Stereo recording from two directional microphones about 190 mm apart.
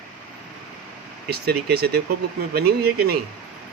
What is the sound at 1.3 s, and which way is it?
Speech, 55° right (ahead or behind).